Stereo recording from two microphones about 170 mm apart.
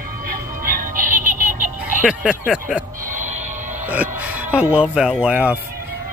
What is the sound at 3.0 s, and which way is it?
Music, 50° right (ahead or behind).